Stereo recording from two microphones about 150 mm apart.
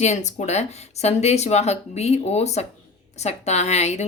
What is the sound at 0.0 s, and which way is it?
A woman's voice, 50° left (ahead or behind).